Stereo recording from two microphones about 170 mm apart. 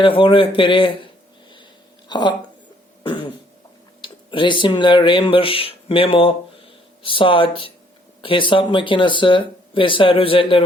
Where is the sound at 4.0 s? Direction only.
30° left (ahead or behind).